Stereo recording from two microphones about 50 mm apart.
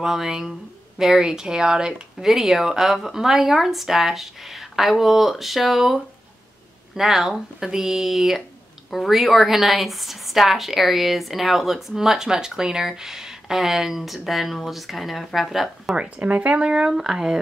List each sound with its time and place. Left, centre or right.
0.0 s speech: centre
16.0 s speech: right; by 17.4 s centre